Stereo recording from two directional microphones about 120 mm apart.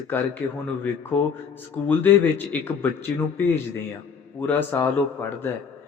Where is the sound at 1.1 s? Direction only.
10° left (ahead or behind).